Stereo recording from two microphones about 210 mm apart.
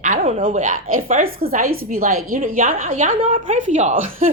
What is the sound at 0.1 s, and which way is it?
A woman's voice, 35° right (ahead or behind).